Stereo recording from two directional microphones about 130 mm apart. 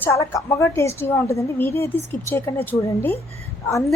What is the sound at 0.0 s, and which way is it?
A woman's voice, 20° left (ahead or behind).